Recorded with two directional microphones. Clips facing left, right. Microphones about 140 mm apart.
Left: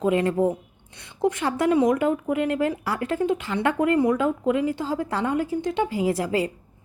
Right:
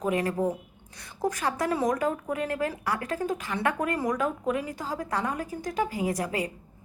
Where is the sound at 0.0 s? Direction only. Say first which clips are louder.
Left 5 dB; 25° left (ahead or behind).